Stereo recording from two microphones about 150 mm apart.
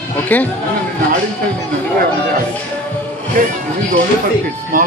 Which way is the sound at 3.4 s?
65° right (ahead or behind).